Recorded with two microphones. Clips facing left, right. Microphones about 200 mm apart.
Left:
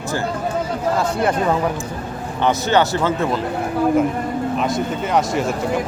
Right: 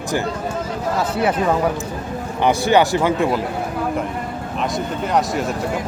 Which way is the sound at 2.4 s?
15° right (ahead or behind).